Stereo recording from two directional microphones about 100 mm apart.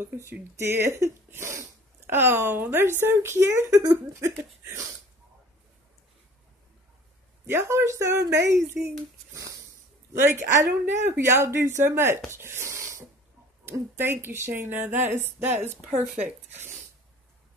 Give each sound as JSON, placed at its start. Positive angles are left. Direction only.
{"t": 0.0, "sound": "speech", "side_deg": -20}
{"t": 7.4, "sound": "speech", "side_deg": -25}
{"t": 16.0, "sound": "speech", "side_deg": -10}